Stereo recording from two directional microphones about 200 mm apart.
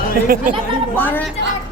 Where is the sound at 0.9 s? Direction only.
10° left (ahead or behind).